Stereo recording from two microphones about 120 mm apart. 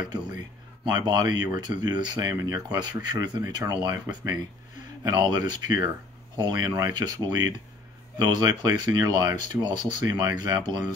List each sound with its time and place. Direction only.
0.8 s speech: 40° right (ahead or behind)